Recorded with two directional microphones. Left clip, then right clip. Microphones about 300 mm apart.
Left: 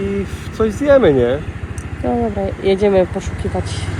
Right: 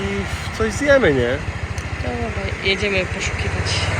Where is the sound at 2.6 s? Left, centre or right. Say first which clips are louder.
Left 6 dB; centre.